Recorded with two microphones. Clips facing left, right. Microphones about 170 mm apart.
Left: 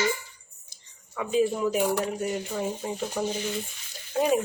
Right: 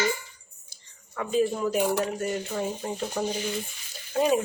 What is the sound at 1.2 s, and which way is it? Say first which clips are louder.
Speech: left 1 dB; 10° left (ahead or behind).